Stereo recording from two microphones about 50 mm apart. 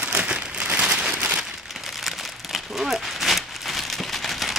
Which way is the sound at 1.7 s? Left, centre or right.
Centre.